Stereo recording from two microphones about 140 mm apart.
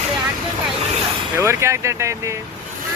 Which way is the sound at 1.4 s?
20° right (ahead or behind).